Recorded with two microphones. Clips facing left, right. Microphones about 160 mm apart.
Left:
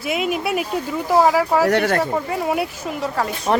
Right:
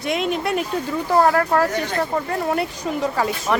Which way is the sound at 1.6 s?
70° left (ahead or behind).